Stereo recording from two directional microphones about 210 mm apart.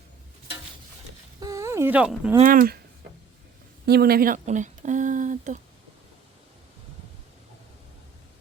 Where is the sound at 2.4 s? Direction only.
40° right (ahead or behind).